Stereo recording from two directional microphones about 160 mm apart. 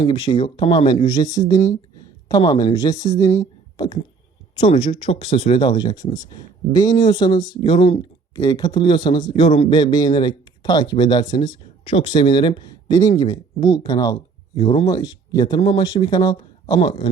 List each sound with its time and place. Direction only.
0.1 s speech: 30° left (ahead or behind)
14.8 s speech: 20° left (ahead or behind)